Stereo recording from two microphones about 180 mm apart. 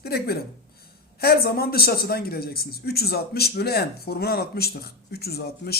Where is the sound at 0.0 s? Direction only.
60° left (ahead or behind).